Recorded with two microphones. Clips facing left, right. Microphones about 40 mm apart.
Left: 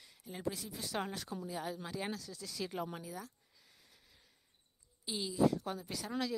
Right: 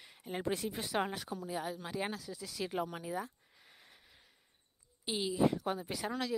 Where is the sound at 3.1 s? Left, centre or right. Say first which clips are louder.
Right 7 dB; right.